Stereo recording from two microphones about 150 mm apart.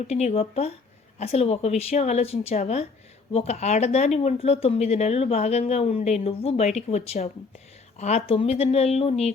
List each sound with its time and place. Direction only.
0.1 s speech: 45° left (ahead or behind)